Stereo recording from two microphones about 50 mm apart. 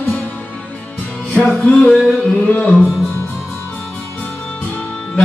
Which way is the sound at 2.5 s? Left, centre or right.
Left.